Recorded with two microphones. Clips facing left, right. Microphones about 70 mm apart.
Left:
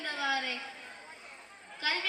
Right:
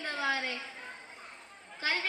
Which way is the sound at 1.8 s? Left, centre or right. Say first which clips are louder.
Right 1 dB; right.